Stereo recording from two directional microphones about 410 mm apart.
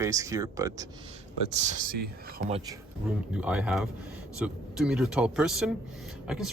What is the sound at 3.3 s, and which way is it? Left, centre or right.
A man's voice, centre.